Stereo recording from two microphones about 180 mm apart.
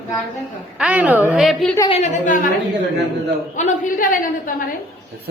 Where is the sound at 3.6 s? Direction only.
45° left (ahead or behind).